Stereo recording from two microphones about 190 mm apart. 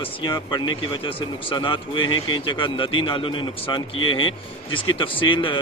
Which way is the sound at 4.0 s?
90° left.